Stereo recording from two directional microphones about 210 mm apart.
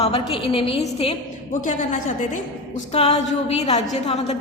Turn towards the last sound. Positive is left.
turn(degrees=30)  # may be behind; listen again after turning